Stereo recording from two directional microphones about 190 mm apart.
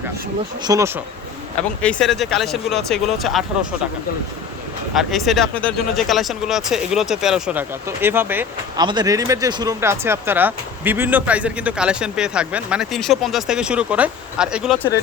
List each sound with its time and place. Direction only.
0.6 s speech: 15° right (ahead or behind)
1.8 s speech: 5° left (ahead or behind)
4.9 s speech: centre (ahead or behind)
8.8 s speech: 20° right (ahead or behind); by 14.8 s 5° right (ahead or behind)